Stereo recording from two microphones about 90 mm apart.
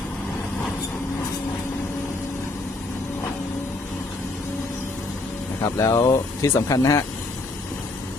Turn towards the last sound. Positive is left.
turn(degrees=35)  # may be behind; listen again after turning